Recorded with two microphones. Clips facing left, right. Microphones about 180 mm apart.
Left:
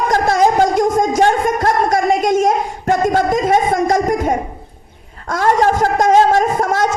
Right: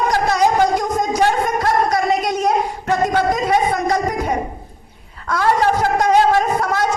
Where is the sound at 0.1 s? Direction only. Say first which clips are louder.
Left 5 dB; 50° left (ahead or behind).